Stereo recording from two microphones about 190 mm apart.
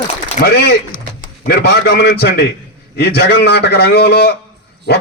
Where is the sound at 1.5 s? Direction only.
60° left (ahead or behind).